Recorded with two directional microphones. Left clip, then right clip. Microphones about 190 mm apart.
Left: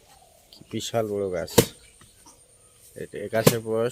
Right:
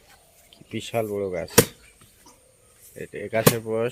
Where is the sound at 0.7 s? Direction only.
15° left (ahead or behind).